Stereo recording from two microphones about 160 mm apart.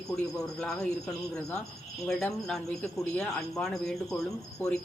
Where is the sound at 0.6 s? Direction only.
5° left (ahead or behind).